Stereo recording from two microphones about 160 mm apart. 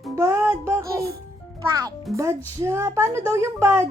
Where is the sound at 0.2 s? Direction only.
15° right (ahead or behind).